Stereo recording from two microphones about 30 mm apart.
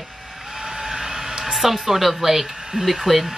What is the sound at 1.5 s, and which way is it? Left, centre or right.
Speech, centre.